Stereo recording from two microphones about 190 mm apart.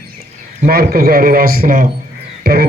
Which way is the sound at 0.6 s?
50° right (ahead or behind).